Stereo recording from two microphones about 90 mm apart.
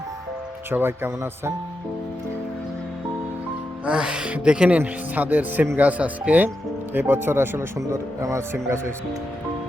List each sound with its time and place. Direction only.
0.7 s speech: 25° right (ahead or behind)
3.8 s speech: 10° right (ahead or behind); by 8.9 s 30° right (ahead or behind)